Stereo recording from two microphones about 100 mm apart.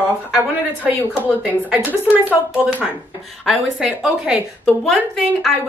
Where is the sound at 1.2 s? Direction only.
15° right (ahead or behind).